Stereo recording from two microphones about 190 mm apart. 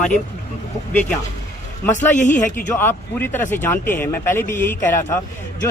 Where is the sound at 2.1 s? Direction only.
40° left (ahead or behind).